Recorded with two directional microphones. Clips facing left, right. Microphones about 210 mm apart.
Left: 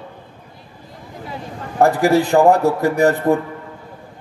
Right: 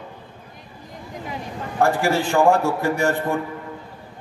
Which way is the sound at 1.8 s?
35° left (ahead or behind).